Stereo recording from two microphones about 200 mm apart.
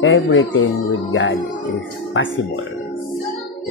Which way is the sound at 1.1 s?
60° left (ahead or behind).